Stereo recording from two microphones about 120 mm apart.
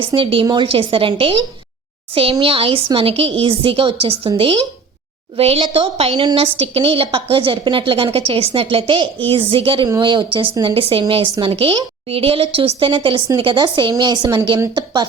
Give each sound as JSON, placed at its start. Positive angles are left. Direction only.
{"t": 0.1, "sound": "a woman's voice", "side_deg": -45}
{"t": 2.4, "sound": "a woman's voice", "side_deg": -50}